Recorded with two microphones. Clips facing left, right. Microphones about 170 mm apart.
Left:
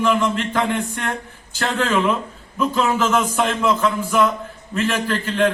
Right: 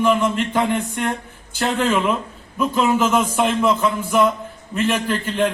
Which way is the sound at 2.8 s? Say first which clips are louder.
Right 2 dB; 10° right (ahead or behind).